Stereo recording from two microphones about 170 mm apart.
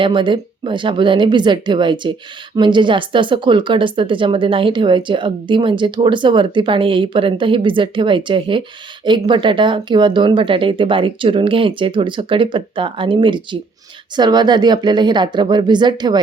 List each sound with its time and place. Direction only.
0.0 s speech: 30° right (ahead or behind)